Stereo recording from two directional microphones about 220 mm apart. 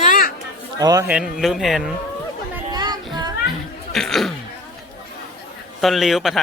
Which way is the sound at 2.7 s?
20° right (ahead or behind).